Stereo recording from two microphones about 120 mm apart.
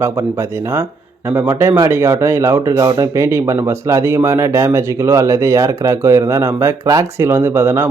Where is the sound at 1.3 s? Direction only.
20° right (ahead or behind).